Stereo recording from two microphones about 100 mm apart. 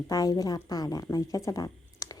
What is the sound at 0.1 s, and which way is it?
Speech, 35° left (ahead or behind).